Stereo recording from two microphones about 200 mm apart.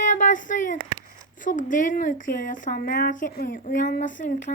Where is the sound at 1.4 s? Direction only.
40° left (ahead or behind).